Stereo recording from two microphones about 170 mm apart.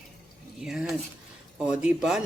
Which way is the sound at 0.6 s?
5° right (ahead or behind).